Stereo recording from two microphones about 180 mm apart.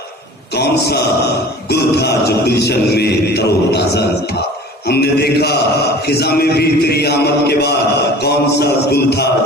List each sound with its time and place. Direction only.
0.5 s speech: 65° left (ahead or behind)
1.7 s chant: 65° left (ahead or behind)